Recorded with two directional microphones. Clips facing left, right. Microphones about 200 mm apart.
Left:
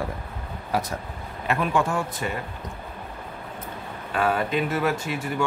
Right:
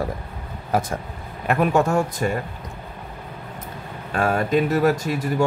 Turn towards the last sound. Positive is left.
turn(degrees=-40)  # may be behind; listen again after turning